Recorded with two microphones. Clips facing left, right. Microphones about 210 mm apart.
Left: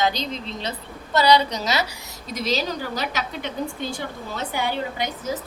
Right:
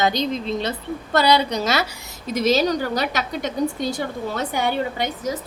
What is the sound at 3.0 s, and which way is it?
A woman's voice, 45° right (ahead or behind).